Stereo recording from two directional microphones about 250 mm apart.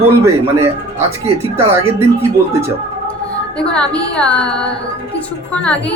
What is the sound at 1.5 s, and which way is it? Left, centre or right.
Speech, right.